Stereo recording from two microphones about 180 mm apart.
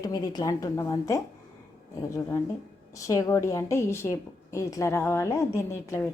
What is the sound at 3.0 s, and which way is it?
A woman's voice, 15° left (ahead or behind).